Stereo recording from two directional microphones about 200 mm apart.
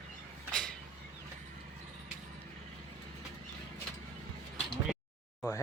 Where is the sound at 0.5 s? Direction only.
5° left (ahead or behind).